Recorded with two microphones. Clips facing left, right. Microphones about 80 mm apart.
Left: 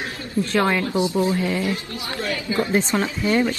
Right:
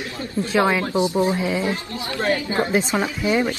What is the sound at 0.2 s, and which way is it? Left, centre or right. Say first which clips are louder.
Speech: left 1 dB; right.